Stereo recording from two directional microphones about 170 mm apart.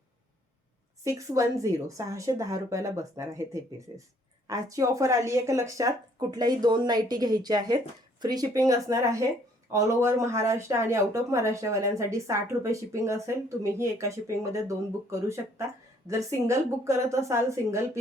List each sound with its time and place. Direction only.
1.0 s speech: 20° right (ahead or behind)